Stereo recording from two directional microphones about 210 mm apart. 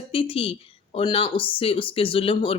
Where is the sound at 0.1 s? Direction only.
25° left (ahead or behind).